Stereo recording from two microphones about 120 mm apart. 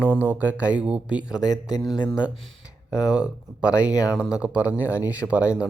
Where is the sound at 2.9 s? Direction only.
5° right (ahead or behind).